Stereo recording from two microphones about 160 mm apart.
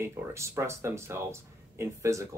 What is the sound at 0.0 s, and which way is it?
Speech, 15° right (ahead or behind).